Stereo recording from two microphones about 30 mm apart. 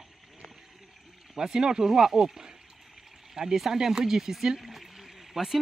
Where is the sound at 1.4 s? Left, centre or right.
Right.